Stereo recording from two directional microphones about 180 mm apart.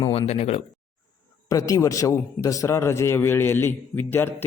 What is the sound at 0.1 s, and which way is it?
Speech, 35° left (ahead or behind).